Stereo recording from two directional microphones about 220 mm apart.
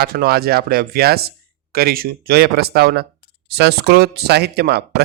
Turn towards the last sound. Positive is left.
turn(degrees=-45)  # may be behind; listen again after turning